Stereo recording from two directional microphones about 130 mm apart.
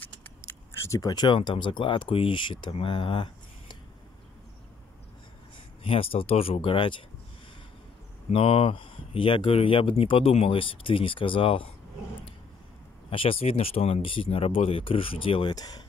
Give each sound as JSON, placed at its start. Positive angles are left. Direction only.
{"t": 0.7, "sound": "speech", "side_deg": 25}
{"t": 5.9, "sound": "speech", "side_deg": 45}
{"t": 8.3, "sound": "speech", "side_deg": 45}
{"t": 13.1, "sound": "speech", "side_deg": 45}